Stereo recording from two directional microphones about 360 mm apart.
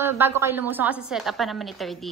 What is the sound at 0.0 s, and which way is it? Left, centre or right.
A woman's voice, centre.